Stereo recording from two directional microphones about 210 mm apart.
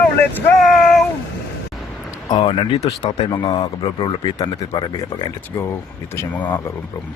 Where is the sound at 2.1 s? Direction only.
20° left (ahead or behind).